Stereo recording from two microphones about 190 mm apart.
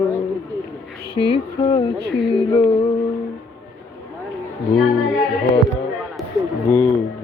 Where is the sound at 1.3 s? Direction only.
25° left (ahead or behind).